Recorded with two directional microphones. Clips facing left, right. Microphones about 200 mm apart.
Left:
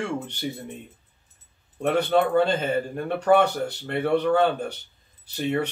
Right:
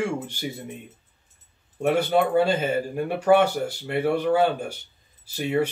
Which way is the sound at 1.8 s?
5° right (ahead or behind).